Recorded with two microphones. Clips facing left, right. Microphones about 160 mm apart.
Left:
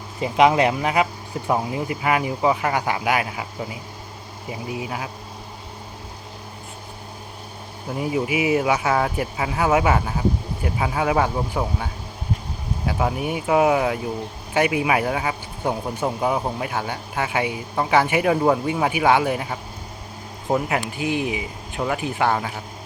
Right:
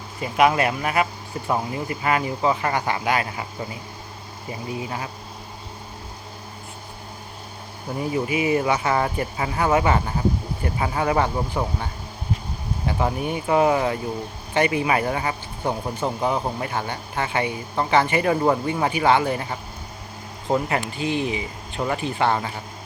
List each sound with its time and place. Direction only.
0.2 s speech: 20° left (ahead or behind)
7.9 s speech: 10° left (ahead or behind)